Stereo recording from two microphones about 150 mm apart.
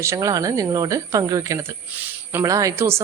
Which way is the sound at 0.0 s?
20° right (ahead or behind).